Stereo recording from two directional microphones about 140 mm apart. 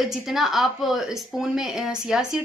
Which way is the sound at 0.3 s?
Centre (ahead or behind).